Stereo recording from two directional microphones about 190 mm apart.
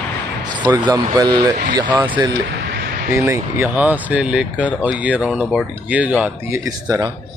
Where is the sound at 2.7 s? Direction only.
55° right (ahead or behind).